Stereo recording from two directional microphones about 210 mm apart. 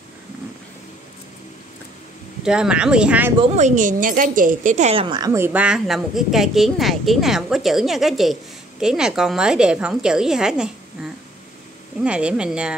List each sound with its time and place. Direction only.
2.4 s a woman's voice: 5° right (ahead or behind)
3.5 s a woman's voice: 35° right (ahead or behind); by 10.7 s 5° right (ahead or behind)
12.0 s a woman's voice: 5° right (ahead or behind)